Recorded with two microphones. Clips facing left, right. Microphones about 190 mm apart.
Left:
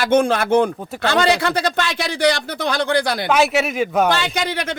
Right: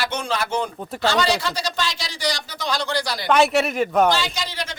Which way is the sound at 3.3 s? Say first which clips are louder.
Right 3 dB; centre (ahead or behind).